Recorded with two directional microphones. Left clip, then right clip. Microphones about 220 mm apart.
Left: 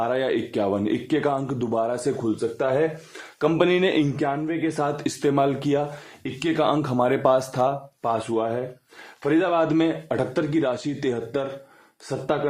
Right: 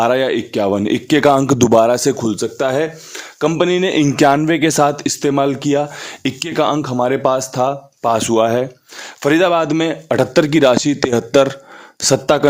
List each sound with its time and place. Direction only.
0.0 s a man's voice: 35° right (ahead or behind); by 2.8 s 55° right (ahead or behind)
3.4 s speech: 25° right (ahead or behind)
4.1 s a man's voice: 45° right (ahead or behind)
4.8 s speech: 30° right (ahead or behind)
6.2 s speech: 40° right (ahead or behind)
8.3 s a man's voice: 50° right (ahead or behind)